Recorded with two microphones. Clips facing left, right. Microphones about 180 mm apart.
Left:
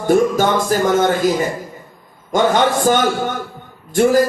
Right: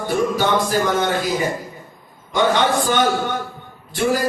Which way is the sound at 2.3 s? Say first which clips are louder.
Left 3 dB; 45° left (ahead or behind).